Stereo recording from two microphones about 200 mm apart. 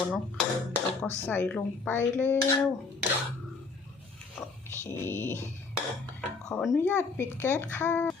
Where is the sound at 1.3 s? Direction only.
5° left (ahead or behind).